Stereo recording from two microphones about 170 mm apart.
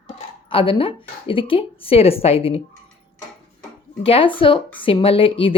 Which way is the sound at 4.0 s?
35° left (ahead or behind).